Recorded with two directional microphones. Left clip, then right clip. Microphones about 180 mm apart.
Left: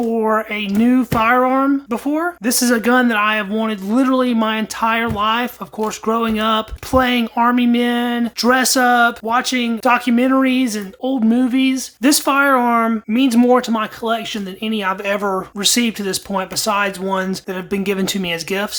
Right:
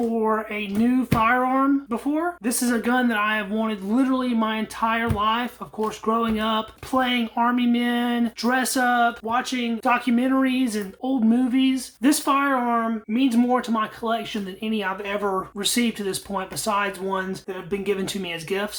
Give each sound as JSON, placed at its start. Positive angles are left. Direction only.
{"t": 0.2, "sound": "speech", "side_deg": 30}